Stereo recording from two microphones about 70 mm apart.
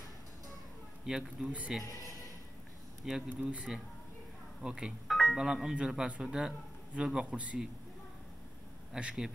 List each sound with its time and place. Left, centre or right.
1.0 s a man's voice: centre
3.3 s a man's voice: centre
5.0 s music: centre
5.4 s a man's voice: centre
8.9 s a man's voice: centre